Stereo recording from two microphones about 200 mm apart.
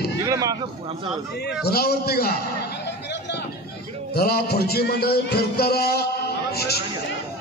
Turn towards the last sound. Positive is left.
turn(degrees=50)  # may be behind; listen again after turning